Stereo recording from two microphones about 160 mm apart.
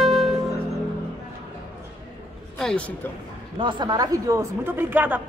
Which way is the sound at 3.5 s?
30° right (ahead or behind).